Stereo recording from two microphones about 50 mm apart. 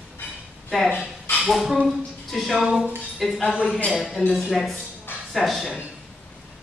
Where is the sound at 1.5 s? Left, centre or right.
Centre.